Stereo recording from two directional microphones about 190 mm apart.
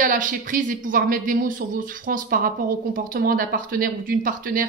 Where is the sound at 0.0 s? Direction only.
45° right (ahead or behind).